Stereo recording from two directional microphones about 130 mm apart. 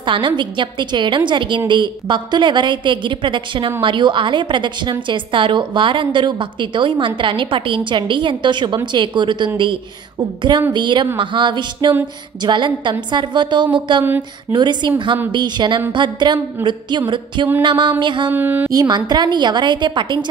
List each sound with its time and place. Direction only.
0.0 s a woman's voice: 40° right (ahead or behind)
18.3 s speech: 15° right (ahead or behind)
18.7 s a woman's voice: 30° right (ahead or behind)